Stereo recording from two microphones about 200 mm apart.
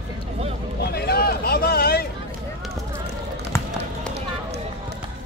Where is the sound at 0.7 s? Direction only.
50° left (ahead or behind).